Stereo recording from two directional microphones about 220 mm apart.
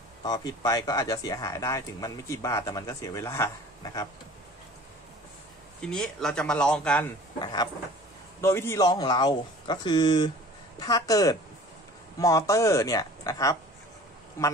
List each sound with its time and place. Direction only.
0.2 s speech: 15° left (ahead or behind)
5.8 s a man's voice: centre (ahead or behind)
7.3 s speech: 20° left (ahead or behind)